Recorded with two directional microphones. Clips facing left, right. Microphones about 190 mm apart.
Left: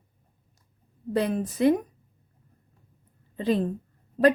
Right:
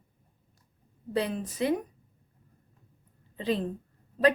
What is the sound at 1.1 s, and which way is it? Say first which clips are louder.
Speech: left 4 dB; 50° left (ahead or behind).